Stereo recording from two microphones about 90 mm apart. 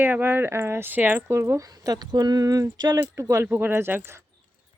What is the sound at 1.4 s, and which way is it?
Speech, 35° right (ahead or behind).